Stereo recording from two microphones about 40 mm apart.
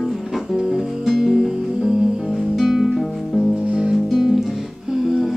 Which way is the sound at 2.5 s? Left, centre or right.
Centre.